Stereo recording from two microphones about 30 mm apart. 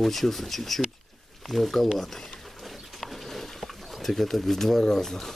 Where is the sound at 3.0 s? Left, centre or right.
Centre.